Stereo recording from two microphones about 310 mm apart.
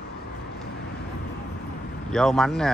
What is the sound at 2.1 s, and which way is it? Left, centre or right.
Speech, centre.